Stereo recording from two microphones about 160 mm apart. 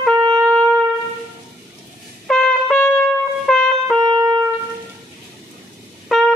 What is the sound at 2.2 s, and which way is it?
Trumpet, 5° left (ahead or behind).